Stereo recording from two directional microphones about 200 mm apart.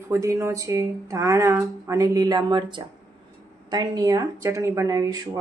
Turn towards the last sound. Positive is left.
turn(degrees=-15)  # may be behind; listen again after turning